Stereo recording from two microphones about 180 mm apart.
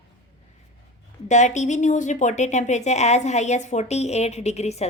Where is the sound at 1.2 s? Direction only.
40° left (ahead or behind).